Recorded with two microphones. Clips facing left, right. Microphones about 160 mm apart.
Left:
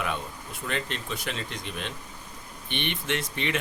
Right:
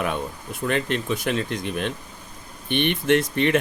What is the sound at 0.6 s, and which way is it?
Speech, 55° right (ahead or behind).